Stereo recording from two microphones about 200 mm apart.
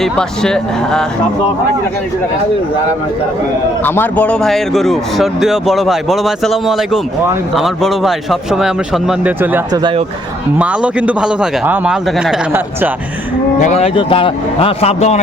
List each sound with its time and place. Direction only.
0.0 s a man's voice: 5° left (ahead or behind)
3.8 s a man's voice: 10° left (ahead or behind); by 12.9 s 5° right (ahead or behind)
13.6 s a man's voice: 35° left (ahead or behind)